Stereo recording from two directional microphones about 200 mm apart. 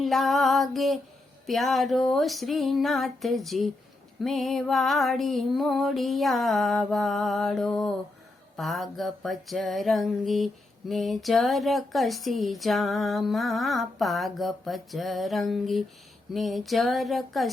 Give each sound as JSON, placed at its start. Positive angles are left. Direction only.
{"t": 0.0, "sound": "music", "side_deg": 0}